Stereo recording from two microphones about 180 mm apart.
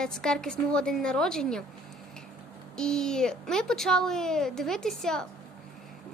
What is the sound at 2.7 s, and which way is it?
A woman's voice, 5° left (ahead or behind).